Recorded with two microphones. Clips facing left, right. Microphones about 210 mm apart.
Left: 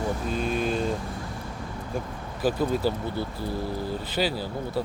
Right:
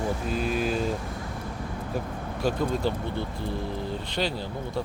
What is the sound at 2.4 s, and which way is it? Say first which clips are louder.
Speech: left 2 dB; 5° left (ahead or behind).